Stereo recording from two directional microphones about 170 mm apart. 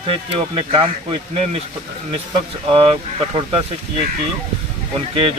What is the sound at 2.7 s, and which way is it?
Speech, 30° right (ahead or behind).